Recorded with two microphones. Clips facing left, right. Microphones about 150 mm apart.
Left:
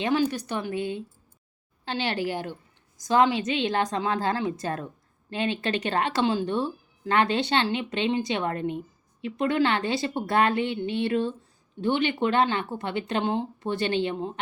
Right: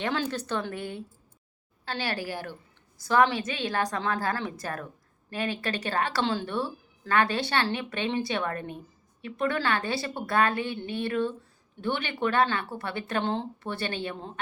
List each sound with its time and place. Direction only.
0.0 s a woman's voice: 15° left (ahead or behind)